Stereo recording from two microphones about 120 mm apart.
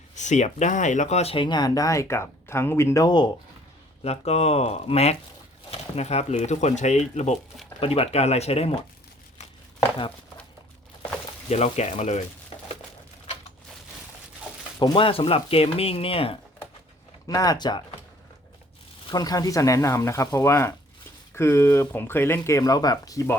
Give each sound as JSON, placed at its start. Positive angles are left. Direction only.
{"t": 0.2, "sound": "speech", "side_deg": 80}
{"t": 1.5, "sound": "speech", "side_deg": 35}
{"t": 4.0, "sound": "speech", "side_deg": 60}
{"t": 7.8, "sound": "speech", "side_deg": 55}
{"t": 11.4, "sound": "speech", "side_deg": 65}
{"t": 14.9, "sound": "speech", "side_deg": 50}
{"t": 17.2, "sound": "speech", "side_deg": 30}
{"t": 19.0, "sound": "speech", "side_deg": 30}